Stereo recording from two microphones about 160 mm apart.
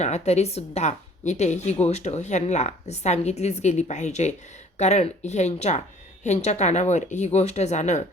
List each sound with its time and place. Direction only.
0.0 s a woman's voice: 45° left (ahead or behind)